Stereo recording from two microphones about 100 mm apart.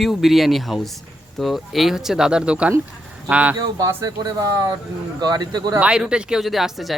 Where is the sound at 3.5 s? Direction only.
35° right (ahead or behind).